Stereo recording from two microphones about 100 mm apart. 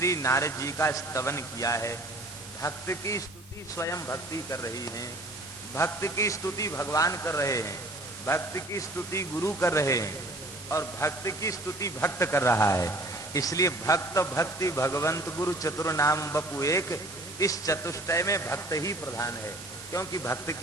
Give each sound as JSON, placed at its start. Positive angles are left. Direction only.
{"t": 0.0, "sound": "a man's voice", "side_deg": 30}